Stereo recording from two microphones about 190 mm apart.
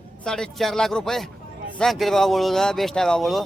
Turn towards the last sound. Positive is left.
turn(degrees=0)  # may be behind; listen again after turning